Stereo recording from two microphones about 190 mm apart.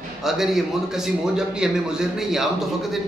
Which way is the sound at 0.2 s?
Centre (ahead or behind).